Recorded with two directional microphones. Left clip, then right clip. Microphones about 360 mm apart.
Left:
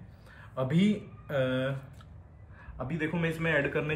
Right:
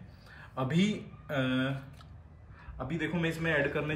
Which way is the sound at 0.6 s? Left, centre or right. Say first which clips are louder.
Left 2 dB; centre.